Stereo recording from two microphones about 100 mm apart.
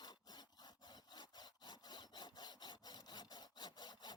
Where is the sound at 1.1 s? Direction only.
45° left (ahead or behind).